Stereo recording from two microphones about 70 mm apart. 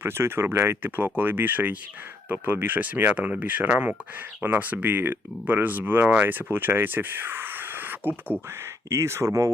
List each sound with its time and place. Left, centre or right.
0.0 s speech: right
8.9 s speech: right